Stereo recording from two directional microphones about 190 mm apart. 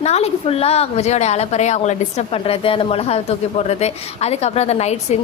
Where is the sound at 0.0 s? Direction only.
35° left (ahead or behind).